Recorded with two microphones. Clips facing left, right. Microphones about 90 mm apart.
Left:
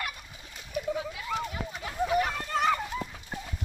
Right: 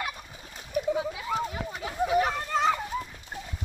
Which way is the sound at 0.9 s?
20° right (ahead or behind).